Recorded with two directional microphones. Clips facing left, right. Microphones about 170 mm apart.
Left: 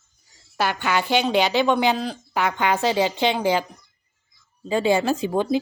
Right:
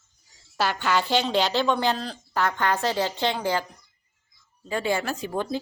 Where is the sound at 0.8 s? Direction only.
15° left (ahead or behind).